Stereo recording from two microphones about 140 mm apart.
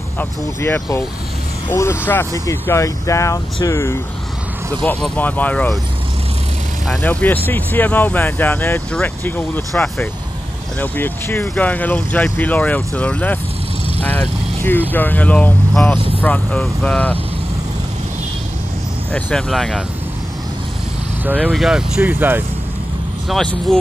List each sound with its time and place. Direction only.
0.2 s speech: 15° left (ahead or behind)
6.9 s speech: 10° left (ahead or behind)
19.1 s speech: 5° left (ahead or behind)
21.3 s speech: 5° right (ahead or behind)
23.2 s speech: 5° left (ahead or behind)